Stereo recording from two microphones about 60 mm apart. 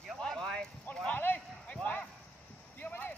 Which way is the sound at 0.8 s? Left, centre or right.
Left.